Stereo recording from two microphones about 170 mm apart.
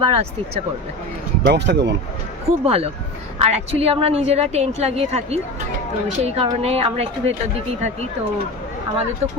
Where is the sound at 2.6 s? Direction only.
35° right (ahead or behind).